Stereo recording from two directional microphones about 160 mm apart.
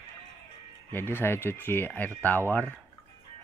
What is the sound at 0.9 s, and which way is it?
Speech, 15° left (ahead or behind).